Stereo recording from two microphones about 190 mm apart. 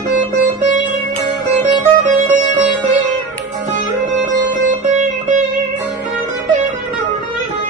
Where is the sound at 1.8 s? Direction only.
40° right (ahead or behind).